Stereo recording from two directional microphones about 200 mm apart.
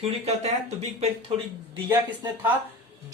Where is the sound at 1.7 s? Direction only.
20° right (ahead or behind).